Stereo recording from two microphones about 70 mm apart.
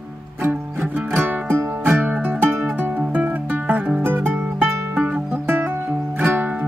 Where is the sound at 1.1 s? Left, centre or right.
Right.